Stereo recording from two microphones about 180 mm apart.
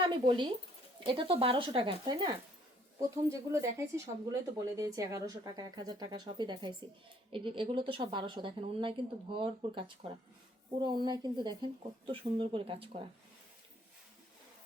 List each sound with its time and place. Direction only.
0.0 s a woman's voice: 25° right (ahead or behind)